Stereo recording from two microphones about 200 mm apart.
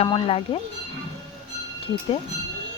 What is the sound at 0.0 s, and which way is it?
Speech, 30° left (ahead or behind).